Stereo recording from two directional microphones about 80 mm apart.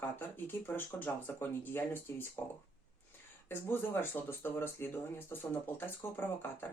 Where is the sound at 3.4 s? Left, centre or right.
Left.